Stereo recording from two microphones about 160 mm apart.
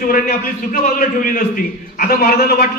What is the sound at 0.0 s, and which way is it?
A man's voice, 60° left (ahead or behind).